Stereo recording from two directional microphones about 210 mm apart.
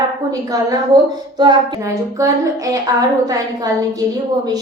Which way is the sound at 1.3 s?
20° right (ahead or behind).